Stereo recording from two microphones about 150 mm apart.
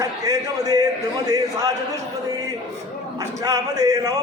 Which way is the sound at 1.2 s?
25° right (ahead or behind).